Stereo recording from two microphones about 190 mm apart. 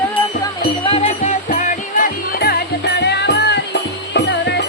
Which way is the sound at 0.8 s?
30° left (ahead or behind).